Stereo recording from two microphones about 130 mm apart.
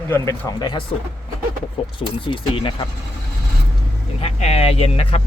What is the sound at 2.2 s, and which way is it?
Speech, 40° left (ahead or behind).